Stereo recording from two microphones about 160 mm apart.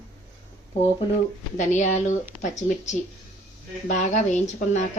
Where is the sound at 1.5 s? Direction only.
50° left (ahead or behind).